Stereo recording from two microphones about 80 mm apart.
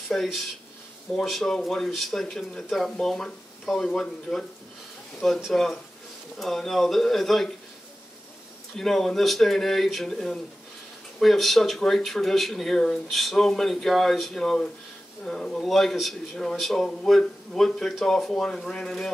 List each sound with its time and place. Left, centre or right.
0.1 s a man's voice: centre
8.7 s a man's voice: centre